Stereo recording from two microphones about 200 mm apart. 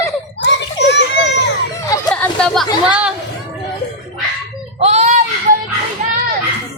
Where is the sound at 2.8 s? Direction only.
5° right (ahead or behind).